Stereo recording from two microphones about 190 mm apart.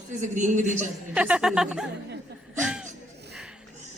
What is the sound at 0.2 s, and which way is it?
Speech, 40° right (ahead or behind).